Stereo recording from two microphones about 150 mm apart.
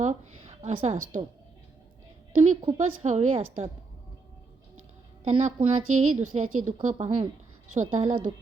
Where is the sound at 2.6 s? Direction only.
45° right (ahead or behind).